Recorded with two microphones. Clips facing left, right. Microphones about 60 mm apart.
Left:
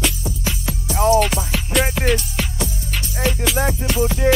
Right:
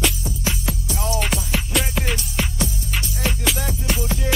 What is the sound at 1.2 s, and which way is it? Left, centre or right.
Music, centre.